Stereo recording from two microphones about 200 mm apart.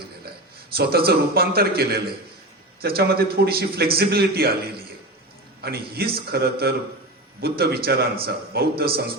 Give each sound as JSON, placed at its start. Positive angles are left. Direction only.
{"t": 0.8, "sound": "a man's voice", "side_deg": -50}
{"t": 5.6, "sound": "a man's voice", "side_deg": -50}